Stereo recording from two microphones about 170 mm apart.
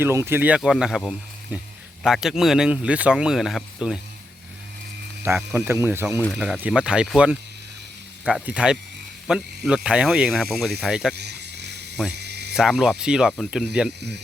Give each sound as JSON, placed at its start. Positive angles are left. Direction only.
{"t": 0.0, "sound": "speech", "side_deg": -15}
{"t": 5.5, "sound": "speech", "side_deg": -15}
{"t": 11.1, "sound": "a sound", "side_deg": -75}
{"t": 12.5, "sound": "speech", "side_deg": 0}